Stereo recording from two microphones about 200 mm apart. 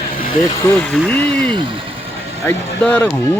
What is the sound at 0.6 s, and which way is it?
Speech, 5° left (ahead or behind).